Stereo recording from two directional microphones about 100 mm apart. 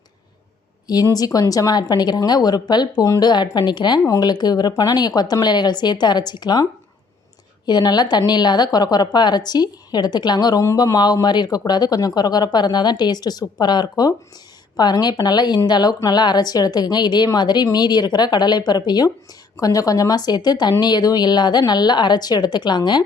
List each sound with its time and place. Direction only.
1.1 s a woman's voice: 40° left (ahead or behind)
7.7 s a woman's voice: 45° left (ahead or behind)